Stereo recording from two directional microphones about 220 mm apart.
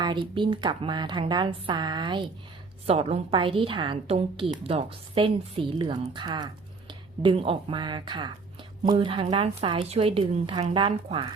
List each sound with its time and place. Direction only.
0.0 s a woman's voice: 20° right (ahead or behind)